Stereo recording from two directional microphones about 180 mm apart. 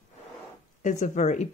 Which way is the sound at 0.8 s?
45° left (ahead or behind).